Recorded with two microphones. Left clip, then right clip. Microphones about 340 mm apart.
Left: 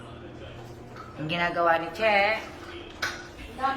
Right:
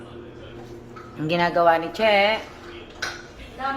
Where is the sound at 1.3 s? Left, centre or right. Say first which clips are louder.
Right 6 dB; centre.